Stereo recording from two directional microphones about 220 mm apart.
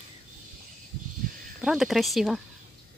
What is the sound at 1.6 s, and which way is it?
Speech, centre (ahead or behind).